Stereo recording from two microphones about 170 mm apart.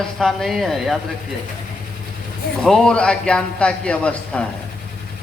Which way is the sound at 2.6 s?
5° left (ahead or behind).